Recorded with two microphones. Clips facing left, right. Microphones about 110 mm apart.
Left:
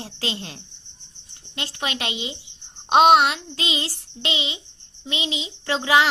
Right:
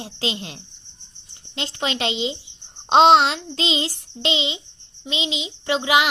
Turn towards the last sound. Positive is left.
turn(degrees=-20)  # may be behind; listen again after turning